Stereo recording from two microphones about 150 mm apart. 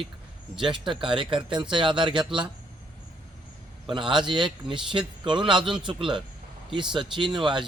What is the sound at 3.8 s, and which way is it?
A man's voice, 35° right (ahead or behind).